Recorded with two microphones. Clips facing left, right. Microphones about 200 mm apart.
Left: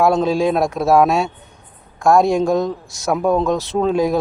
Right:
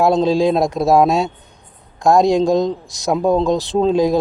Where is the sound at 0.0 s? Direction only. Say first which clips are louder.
Right 1 dB; 35° right (ahead or behind).